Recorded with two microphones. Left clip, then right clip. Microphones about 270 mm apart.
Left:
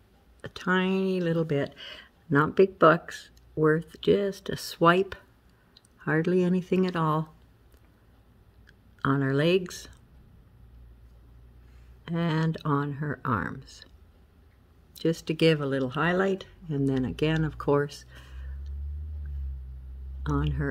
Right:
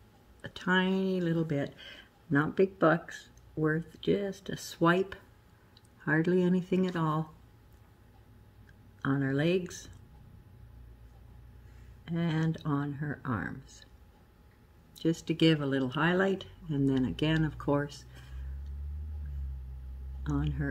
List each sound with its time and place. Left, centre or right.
0.4 s speech: left
9.0 s speech: left
12.0 s speech: left
15.0 s speech: left
20.2 s speech: left